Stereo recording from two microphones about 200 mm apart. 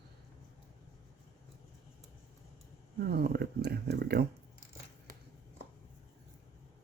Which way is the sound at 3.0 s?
50° right (ahead or behind).